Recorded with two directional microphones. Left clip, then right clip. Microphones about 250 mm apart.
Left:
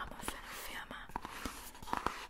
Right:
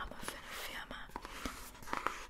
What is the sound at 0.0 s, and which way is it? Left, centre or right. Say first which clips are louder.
Whispering: left 1 dB; centre.